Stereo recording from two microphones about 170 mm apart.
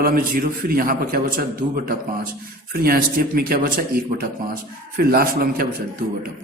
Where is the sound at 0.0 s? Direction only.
60° right (ahead or behind).